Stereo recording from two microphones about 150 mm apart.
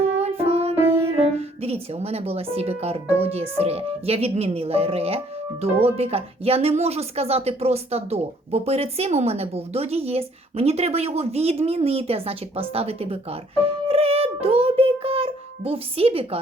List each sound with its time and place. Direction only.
0.2 s music: 45° right (ahead or behind)
0.9 s speech: 40° right (ahead or behind)